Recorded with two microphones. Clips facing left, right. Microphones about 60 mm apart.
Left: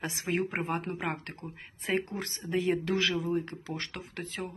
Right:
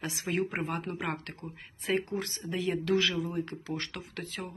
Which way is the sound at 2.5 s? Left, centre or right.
Left.